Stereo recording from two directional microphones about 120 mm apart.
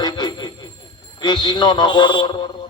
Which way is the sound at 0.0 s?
35° left (ahead or behind).